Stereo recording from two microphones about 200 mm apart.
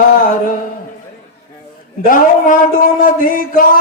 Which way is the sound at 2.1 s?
40° left (ahead or behind).